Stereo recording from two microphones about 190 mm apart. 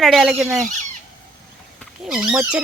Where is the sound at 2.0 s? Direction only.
5° right (ahead or behind).